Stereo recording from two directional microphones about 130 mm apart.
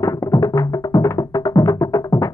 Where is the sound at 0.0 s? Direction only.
25° left (ahead or behind).